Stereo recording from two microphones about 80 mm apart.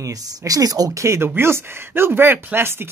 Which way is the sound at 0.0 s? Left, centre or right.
Right.